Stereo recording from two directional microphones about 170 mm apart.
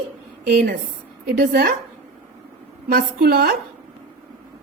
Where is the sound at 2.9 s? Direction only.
65° right (ahead or behind).